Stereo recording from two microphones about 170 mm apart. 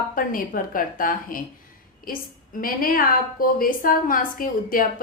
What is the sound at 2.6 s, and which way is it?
A woman's voice, 55° left (ahead or behind).